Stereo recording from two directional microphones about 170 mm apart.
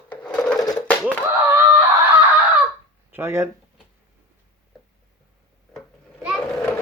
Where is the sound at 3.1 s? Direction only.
15° right (ahead or behind).